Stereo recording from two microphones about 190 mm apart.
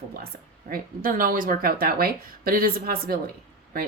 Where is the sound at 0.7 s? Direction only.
45° right (ahead or behind).